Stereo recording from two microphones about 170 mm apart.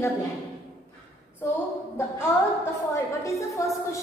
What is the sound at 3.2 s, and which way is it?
Speech, 20° left (ahead or behind).